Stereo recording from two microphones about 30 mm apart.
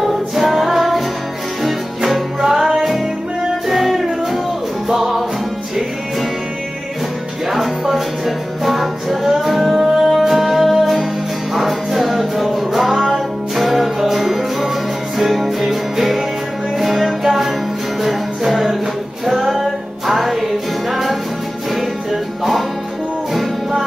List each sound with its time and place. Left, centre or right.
0.0 s music: centre
2.4 s music: centre
8.6 s music: centre